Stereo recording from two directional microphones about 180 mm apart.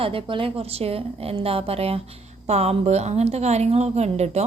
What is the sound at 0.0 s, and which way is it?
A woman's voice, 30° right (ahead or behind).